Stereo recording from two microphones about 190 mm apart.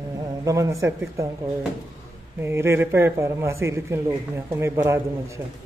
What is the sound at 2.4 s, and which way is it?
Speech, 15° right (ahead or behind).